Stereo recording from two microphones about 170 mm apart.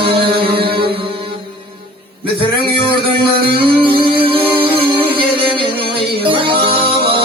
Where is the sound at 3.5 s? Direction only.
30° right (ahead or behind).